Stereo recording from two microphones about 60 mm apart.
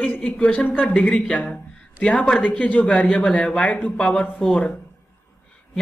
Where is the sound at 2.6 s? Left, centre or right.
Left.